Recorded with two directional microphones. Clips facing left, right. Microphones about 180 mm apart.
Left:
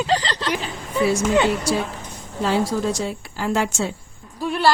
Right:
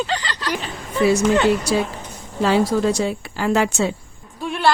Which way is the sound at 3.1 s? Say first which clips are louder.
Right 4 dB; 85° right.